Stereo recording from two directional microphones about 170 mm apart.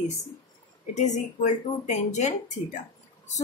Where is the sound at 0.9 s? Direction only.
45° left (ahead or behind).